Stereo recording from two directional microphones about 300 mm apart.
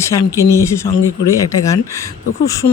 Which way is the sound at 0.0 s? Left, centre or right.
Centre.